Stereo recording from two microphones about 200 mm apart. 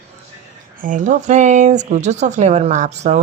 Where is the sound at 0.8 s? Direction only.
40° right (ahead or behind).